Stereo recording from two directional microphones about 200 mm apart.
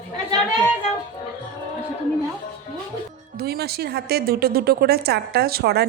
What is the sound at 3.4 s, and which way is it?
A woman's voice, 50° right (ahead or behind).